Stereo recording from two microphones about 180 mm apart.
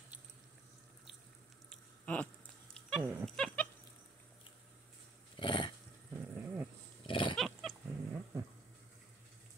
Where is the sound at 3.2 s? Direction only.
5° left (ahead or behind).